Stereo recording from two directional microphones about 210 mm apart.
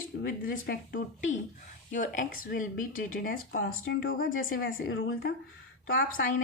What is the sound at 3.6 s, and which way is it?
Speech, 65° left (ahead or behind).